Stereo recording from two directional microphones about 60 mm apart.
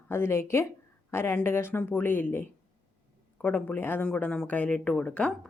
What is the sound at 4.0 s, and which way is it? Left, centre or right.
Speech, centre.